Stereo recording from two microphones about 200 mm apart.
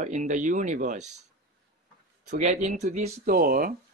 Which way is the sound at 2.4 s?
35° right (ahead or behind).